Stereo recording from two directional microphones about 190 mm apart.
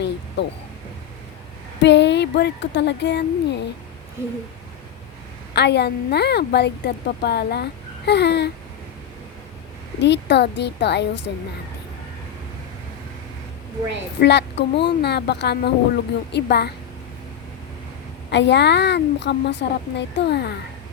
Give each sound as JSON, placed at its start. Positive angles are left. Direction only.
{"t": 0.4, "sound": "a woman's voice", "side_deg": 65}
{"t": 1.8, "sound": "speech", "side_deg": 65}
{"t": 4.2, "sound": "a sound", "side_deg": -15}
{"t": 5.5, "sound": "a woman's voice", "side_deg": 60}
{"t": 10.0, "sound": "a woman's voice", "side_deg": 65}
{"t": 14.2, "sound": "a woman's voice", "side_deg": 65}
{"t": 18.3, "sound": "a woman's voice", "side_deg": 65}